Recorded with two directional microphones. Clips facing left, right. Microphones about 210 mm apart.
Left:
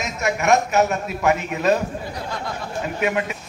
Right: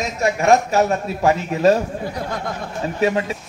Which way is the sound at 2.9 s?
30° right (ahead or behind).